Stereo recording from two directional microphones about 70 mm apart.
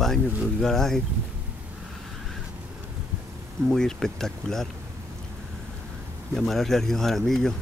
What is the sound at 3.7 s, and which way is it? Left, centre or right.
Speech, centre.